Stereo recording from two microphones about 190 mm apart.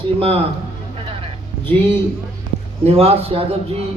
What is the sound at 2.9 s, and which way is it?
Speech, 30° right (ahead or behind).